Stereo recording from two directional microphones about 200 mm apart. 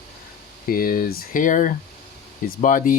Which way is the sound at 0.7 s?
45° left (ahead or behind).